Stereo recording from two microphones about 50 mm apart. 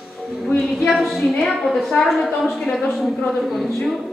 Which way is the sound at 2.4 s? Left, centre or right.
Centre.